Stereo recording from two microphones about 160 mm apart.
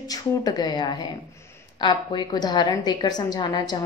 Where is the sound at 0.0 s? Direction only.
25° left (ahead or behind).